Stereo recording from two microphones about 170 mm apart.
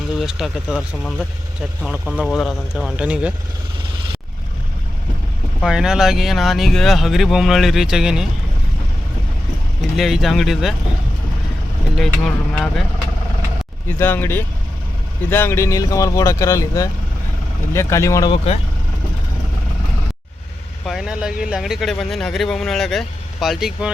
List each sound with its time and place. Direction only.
0.2 s speech: centre (ahead or behind)
5.6 s speech: 5° right (ahead or behind)
10.0 s speech: centre (ahead or behind)
11.9 s speech: centre (ahead or behind)
14.0 s speech: 10° left (ahead or behind)
20.8 s speech: 5° right (ahead or behind)